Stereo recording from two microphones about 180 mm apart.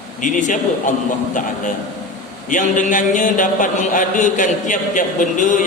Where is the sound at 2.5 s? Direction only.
45° left (ahead or behind).